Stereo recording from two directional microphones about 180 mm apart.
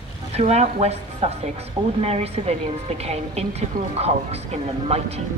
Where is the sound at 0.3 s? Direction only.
35° right (ahead or behind).